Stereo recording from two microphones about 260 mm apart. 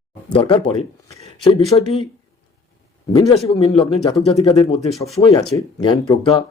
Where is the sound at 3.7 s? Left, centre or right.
Left.